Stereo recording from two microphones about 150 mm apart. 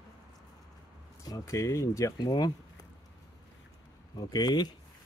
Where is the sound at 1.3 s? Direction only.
20° left (ahead or behind).